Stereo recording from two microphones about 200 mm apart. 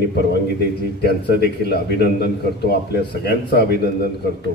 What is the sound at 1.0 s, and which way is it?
A man's voice, 55° left (ahead or behind).